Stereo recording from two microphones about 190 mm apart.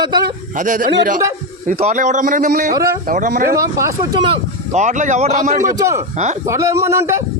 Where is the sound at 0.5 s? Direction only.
45° right (ahead or behind).